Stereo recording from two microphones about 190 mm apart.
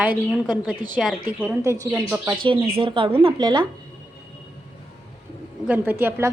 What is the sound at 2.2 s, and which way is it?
Speech, 25° right (ahead or behind).